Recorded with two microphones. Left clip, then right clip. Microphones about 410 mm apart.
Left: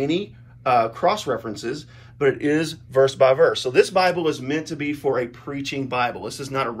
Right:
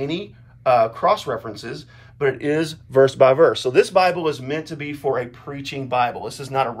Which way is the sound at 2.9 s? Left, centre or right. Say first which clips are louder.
Right 2 dB; centre.